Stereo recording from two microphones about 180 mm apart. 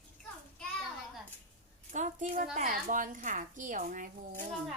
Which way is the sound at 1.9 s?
45° right (ahead or behind).